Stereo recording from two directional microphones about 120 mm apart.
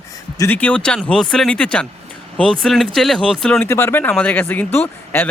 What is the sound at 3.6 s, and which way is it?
Speech, 20° left (ahead or behind).